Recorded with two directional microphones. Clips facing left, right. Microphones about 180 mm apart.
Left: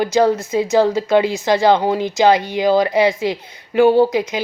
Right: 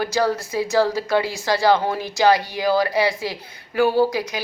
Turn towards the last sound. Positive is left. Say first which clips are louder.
# left 5 dB
turn(degrees=20)  # may be behind; listen again after turning